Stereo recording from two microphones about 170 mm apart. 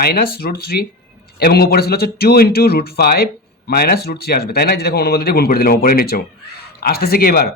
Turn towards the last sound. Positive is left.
turn(degrees=60)  # may be behind; listen again after turning